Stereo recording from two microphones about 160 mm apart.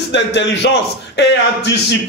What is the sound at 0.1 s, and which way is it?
A man's voice, 90° left.